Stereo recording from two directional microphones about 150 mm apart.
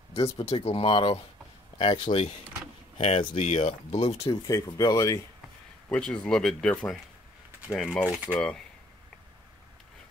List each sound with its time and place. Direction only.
0.1 s speech: 40° left (ahead or behind)
3.0 s speech: 45° left (ahead or behind)
4.5 s speech: 25° left (ahead or behind)
5.9 s speech: 5° left (ahead or behind)
8.1 s speech: 10° right (ahead or behind)